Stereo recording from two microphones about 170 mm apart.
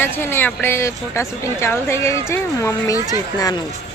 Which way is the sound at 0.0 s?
15° left (ahead or behind).